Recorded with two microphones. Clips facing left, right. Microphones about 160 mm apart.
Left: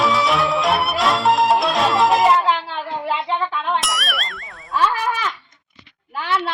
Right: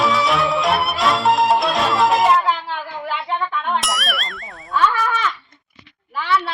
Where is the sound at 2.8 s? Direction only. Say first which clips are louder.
Left 3 dB; 30° left (ahead or behind).